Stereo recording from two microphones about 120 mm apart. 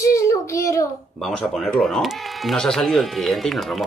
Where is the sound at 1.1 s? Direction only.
Centre (ahead or behind).